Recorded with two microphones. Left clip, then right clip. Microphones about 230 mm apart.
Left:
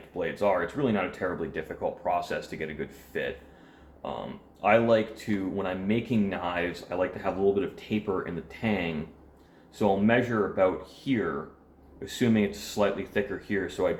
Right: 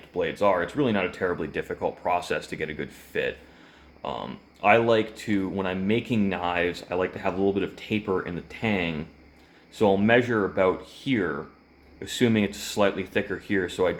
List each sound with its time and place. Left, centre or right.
0.2 s speech: right
4.6 s speech: right